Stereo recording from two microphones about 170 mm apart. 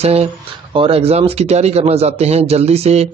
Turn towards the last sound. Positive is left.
turn(degrees=-40)  # may be behind; listen again after turning